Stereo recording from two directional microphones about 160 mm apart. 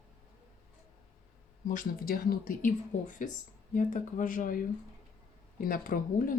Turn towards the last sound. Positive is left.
turn(degrees=60)  # may be behind; listen again after turning